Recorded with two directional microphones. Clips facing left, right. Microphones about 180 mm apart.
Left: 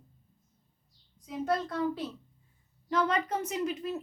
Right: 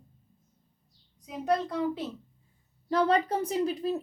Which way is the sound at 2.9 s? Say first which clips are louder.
Right 4 dB; 35° right (ahead or behind).